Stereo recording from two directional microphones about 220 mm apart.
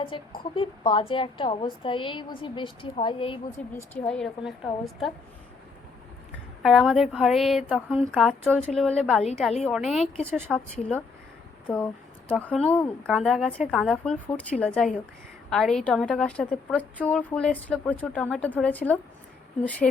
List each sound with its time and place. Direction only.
0.0 s a woman's voice: 20° left (ahead or behind)
3.8 s a woman's voice: 5° left (ahead or behind)
6.6 s a woman's voice: centre (ahead or behind)